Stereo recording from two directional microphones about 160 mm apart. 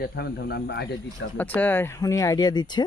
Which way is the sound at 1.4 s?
10° left (ahead or behind).